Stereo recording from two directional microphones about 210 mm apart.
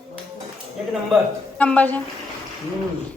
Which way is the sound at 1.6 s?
5° left (ahead or behind).